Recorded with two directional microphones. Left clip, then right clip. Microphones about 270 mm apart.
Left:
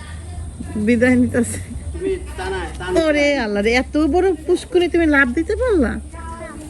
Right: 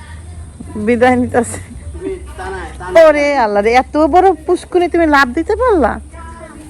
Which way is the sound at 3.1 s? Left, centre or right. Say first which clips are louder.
Right 3 dB; right.